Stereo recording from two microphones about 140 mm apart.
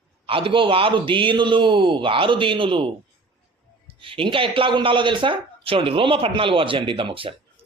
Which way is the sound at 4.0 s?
40° right (ahead or behind).